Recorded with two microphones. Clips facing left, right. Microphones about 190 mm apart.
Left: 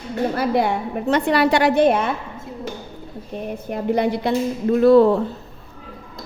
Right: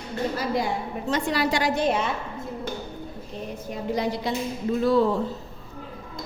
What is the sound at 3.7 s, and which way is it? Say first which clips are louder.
A woman's voice: left 7 dB; 60° left (ahead or behind).